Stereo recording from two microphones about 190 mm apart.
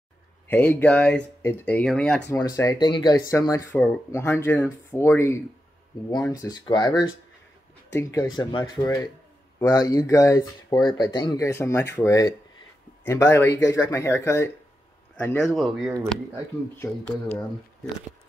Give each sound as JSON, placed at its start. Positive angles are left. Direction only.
{"t": 0.5, "sound": "speech", "side_deg": 10}
{"t": 2.3, "sound": "speech", "side_deg": 15}
{"t": 15.4, "sound": "speech", "side_deg": 0}
{"t": 16.7, "sound": "speech", "side_deg": 10}